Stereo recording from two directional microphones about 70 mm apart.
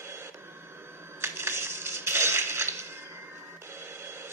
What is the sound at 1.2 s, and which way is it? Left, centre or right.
Crushing, right.